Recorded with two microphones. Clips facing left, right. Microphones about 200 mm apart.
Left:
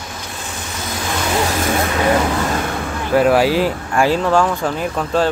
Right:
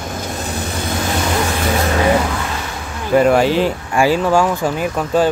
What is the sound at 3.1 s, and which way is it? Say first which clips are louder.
Speech: right 1 dB; 5° left (ahead or behind).